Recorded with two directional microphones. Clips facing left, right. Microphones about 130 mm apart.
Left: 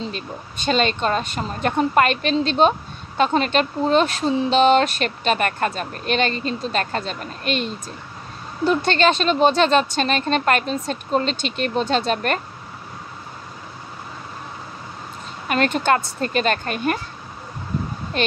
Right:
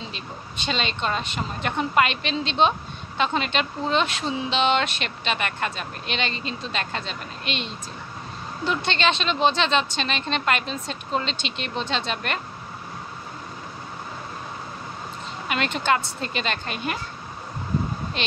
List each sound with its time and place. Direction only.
0.1 s speech: 45° left (ahead or behind)
15.4 s speech: 45° left (ahead or behind)
18.1 s speech: 45° left (ahead or behind)